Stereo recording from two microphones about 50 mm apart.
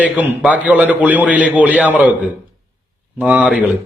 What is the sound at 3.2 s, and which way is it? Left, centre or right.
Speech, right.